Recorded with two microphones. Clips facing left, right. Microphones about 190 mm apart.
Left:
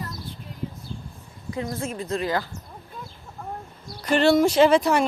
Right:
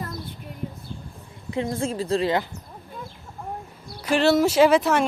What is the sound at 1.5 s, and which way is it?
Speech, 25° right (ahead or behind).